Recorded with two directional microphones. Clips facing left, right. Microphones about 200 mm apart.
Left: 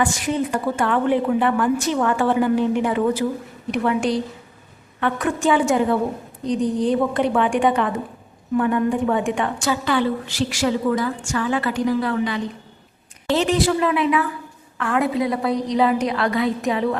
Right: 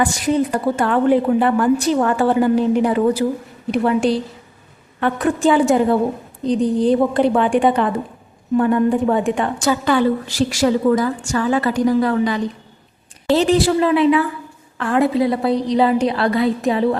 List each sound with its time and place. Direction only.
0.0 s a woman's voice: 35° right (ahead or behind)